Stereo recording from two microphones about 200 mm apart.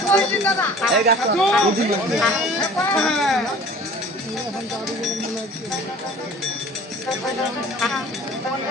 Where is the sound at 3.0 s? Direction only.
Centre (ahead or behind).